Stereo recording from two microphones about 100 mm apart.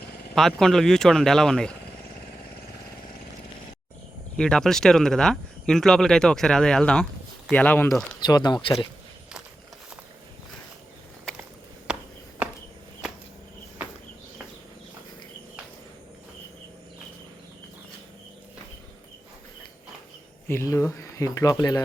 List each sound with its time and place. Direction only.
0.3 s speech: 5° left (ahead or behind)
4.4 s speech: 5° left (ahead or behind)
8.2 s speech: 45° left (ahead or behind)
11.9 s a sound: 10° right (ahead or behind)
20.5 s speech: 30° left (ahead or behind)